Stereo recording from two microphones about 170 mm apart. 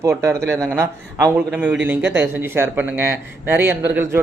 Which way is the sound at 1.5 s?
5° right (ahead or behind).